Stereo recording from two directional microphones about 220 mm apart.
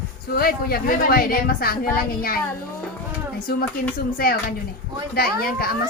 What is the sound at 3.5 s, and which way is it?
Speech, 45° left (ahead or behind).